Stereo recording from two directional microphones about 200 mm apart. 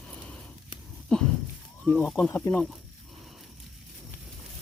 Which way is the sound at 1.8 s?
5° left (ahead or behind).